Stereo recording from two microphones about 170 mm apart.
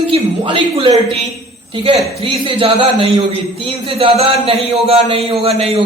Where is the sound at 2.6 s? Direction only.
30° right (ahead or behind).